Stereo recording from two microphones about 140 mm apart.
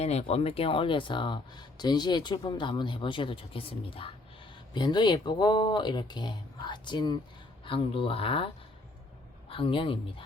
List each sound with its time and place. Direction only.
0.0 s speech: 50° left (ahead or behind)
9.5 s speech: 40° left (ahead or behind)